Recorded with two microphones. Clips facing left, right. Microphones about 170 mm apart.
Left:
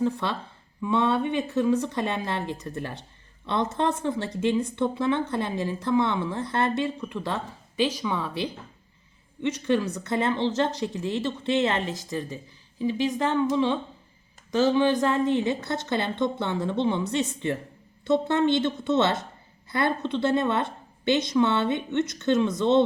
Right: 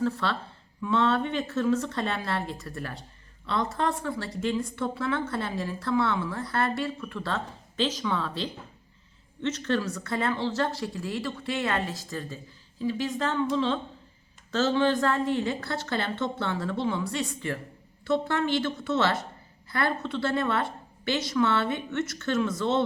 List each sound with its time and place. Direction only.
0.0 s a woman's voice: 15° left (ahead or behind)